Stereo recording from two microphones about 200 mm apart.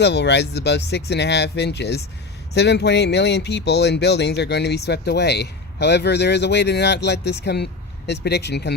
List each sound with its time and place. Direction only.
0.0 s speech: 60° left (ahead or behind)